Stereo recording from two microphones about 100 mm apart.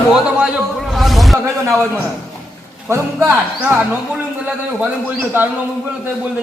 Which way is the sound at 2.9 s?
25° right (ahead or behind).